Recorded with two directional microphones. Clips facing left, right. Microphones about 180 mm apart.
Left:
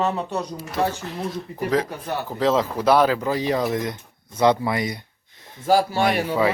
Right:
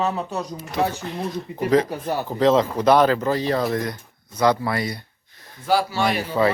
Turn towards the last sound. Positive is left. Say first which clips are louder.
# left 2 dB
turn(degrees=55)  # may be behind; listen again after turning